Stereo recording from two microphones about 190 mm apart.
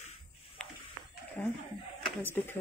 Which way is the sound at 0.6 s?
5° left (ahead or behind).